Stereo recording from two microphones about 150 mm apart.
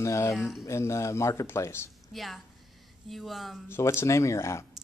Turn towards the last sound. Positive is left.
turn(degrees=20)  # may be behind; listen again after turning